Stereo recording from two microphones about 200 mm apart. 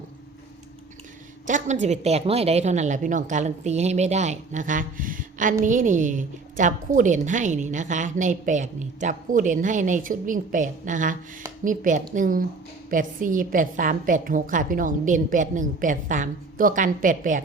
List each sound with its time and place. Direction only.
1.5 s a woman's voice: 40° right (ahead or behind)